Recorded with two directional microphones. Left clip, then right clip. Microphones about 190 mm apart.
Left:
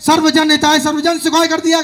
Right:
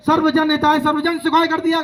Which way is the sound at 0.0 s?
40° left (ahead or behind).